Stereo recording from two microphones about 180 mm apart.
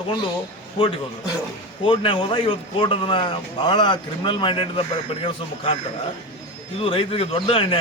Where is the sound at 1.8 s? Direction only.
30° left (ahead or behind).